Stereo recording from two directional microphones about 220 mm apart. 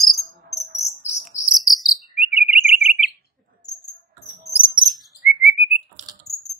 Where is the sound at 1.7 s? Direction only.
Centre (ahead or behind).